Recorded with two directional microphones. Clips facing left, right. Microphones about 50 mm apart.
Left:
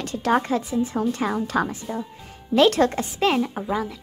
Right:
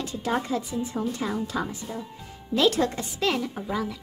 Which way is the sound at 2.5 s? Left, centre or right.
Left.